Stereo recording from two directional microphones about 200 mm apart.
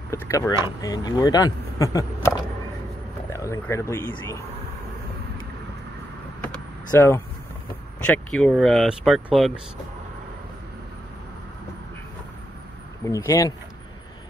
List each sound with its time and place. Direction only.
0.1 s speech: 15° left (ahead or behind)
6.9 s speech: 10° left (ahead or behind)
13.0 s speech: 15° left (ahead or behind)